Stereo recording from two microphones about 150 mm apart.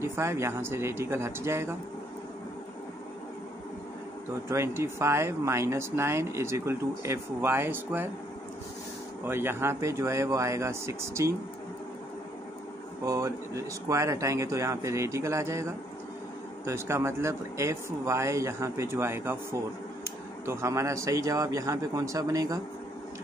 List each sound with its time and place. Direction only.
0.0 s speech: 15° right (ahead or behind)
4.5 s speech: 15° right (ahead or behind)
9.2 s speech: 15° right (ahead or behind)
13.0 s speech: 20° right (ahead or behind)